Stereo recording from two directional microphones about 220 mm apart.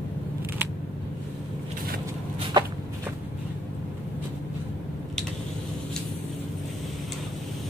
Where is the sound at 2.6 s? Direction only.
20° right (ahead or behind).